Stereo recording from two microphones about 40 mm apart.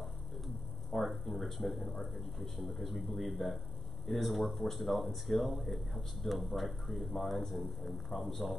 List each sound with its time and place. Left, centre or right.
0.9 s speech: centre